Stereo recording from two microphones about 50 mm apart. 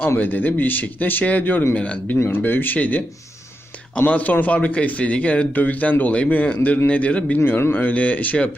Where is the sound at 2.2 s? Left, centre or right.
Left.